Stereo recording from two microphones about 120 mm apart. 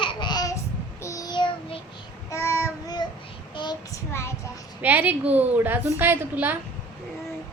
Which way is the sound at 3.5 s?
35° left (ahead or behind).